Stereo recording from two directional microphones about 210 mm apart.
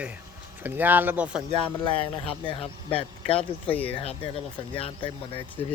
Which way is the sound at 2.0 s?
25° left (ahead or behind).